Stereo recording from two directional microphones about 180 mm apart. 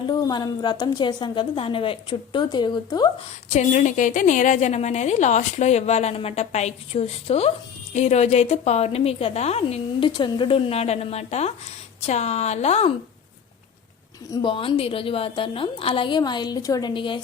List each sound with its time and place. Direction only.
0.0 s a woman's voice: 25° left (ahead or behind)
3.5 s a woman's voice: 40° left (ahead or behind)
14.3 s a woman's voice: 30° left (ahead or behind)